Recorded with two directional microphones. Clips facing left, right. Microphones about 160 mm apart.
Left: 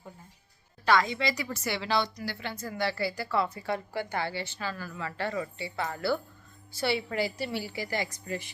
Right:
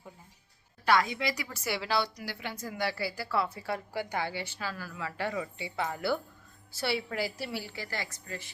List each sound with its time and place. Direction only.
0.9 s speech: 10° right (ahead or behind)
6.7 s a woman's voice: centre (ahead or behind)
7.7 s speech: 15° left (ahead or behind)